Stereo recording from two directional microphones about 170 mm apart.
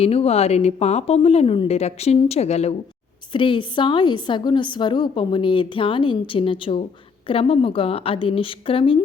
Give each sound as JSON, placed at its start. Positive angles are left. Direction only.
{"t": 0.0, "sound": "speech", "side_deg": 35}
{"t": 3.3, "sound": "a woman's voice", "side_deg": 30}